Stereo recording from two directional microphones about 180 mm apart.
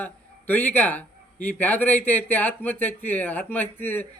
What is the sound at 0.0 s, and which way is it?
Speech, 10° left (ahead or behind).